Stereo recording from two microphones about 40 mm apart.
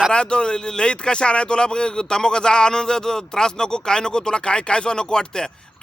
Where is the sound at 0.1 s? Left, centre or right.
Left.